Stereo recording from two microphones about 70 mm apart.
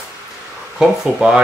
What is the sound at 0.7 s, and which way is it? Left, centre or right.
Speech, centre.